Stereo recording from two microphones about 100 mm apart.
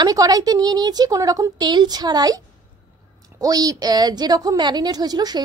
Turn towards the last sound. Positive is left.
turn(degrees=-40)  # may be behind; listen again after turning